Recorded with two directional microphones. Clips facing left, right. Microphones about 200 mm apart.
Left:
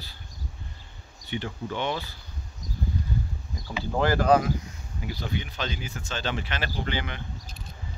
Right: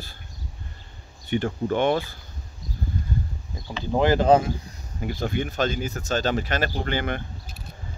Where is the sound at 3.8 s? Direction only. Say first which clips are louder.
Right 4 dB; 20° right (ahead or behind).